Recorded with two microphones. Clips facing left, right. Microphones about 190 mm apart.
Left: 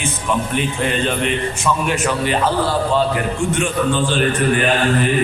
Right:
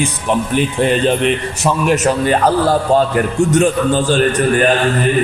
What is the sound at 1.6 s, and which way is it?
A man's voice, 40° right (ahead or behind).